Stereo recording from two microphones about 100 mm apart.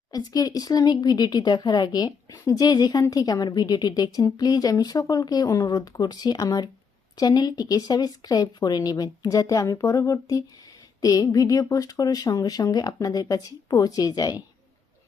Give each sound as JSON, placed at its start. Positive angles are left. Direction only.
{"t": 0.1, "sound": "a woman's voice", "side_deg": 40}